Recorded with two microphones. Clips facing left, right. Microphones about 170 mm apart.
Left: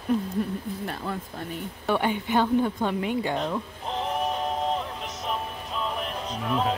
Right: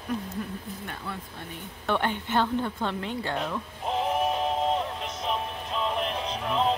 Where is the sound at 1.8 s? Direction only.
10° left (ahead or behind).